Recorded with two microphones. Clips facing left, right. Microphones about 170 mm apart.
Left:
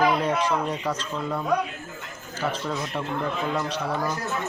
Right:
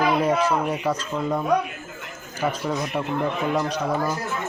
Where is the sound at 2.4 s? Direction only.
15° right (ahead or behind).